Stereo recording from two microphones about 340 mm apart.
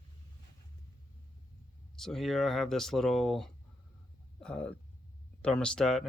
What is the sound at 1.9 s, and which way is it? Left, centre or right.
Speech, centre.